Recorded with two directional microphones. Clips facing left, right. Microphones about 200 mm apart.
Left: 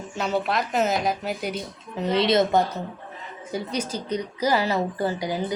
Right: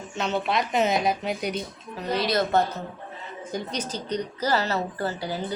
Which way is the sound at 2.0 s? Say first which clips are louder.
Left 5 dB; 25° left (ahead or behind).